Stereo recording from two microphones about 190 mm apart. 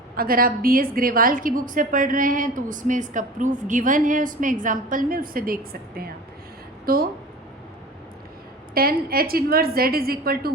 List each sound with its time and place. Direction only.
0.2 s a woman's voice: 50° right (ahead or behind)
8.7 s a woman's voice: 50° right (ahead or behind)